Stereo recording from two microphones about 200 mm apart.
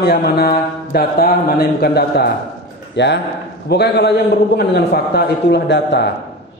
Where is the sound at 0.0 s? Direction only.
50° left (ahead or behind).